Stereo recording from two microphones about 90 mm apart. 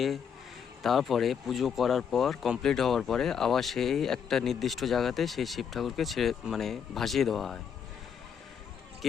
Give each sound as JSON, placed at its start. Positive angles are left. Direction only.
{"t": 0.8, "sound": "speech", "side_deg": 0}